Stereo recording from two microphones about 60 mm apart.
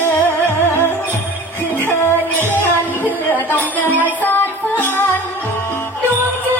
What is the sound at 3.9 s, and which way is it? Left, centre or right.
Music, right.